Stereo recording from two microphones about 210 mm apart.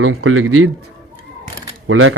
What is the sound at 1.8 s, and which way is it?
Speech, 70° right (ahead or behind).